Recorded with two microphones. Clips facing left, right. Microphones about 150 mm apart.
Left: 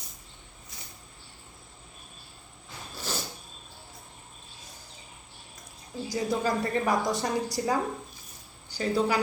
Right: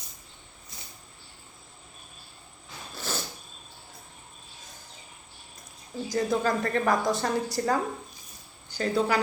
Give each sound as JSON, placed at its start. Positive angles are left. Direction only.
{"t": 2.9, "sound": "a sound", "side_deg": 10}
{"t": 6.1, "sound": "a woman's voice", "side_deg": 10}
{"t": 8.8, "sound": "a woman's voice", "side_deg": 10}